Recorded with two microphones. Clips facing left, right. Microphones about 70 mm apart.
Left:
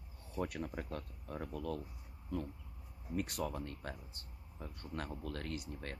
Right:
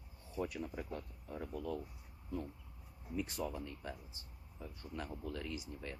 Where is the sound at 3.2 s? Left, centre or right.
Left.